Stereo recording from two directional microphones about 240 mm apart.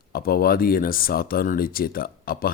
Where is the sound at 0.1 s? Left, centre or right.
Left.